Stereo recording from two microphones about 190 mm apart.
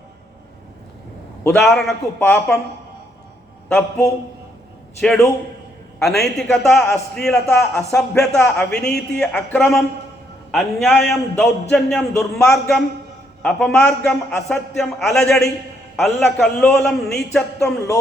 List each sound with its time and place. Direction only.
1.5 s a man's voice: 5° left (ahead or behind)
3.7 s a man's voice: 10° left (ahead or behind)
17.6 s a man's voice: 15° left (ahead or behind)